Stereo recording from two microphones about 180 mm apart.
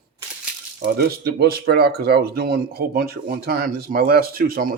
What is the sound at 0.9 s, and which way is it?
Speech, 60° right (ahead or behind).